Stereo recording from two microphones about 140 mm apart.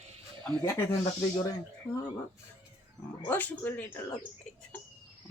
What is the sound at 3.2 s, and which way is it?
Speech, 15° left (ahead or behind).